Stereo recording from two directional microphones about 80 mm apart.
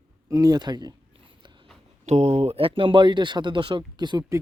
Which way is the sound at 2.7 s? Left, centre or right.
Right.